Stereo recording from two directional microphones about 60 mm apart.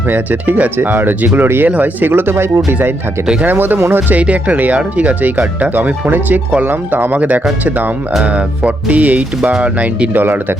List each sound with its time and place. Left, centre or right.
0.1 s speech: right
4.1 s speech: right